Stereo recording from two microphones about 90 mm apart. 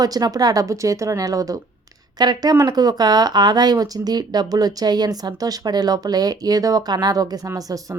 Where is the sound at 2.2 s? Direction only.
50° right (ahead or behind).